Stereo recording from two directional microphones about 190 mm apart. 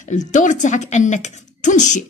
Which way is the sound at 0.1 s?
40° left (ahead or behind).